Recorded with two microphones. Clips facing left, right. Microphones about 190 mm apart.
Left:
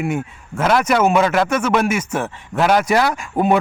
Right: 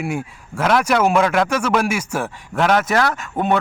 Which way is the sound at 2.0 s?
10° right (ahead or behind).